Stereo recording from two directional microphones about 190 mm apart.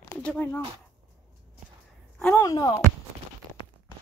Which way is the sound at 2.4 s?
20° left (ahead or behind).